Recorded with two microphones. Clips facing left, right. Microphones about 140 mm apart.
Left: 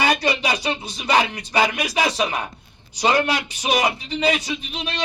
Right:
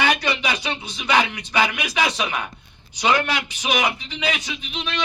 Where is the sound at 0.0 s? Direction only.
40° left (ahead or behind).